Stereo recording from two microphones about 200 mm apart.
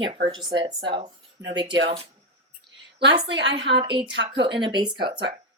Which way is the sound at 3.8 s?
25° right (ahead or behind).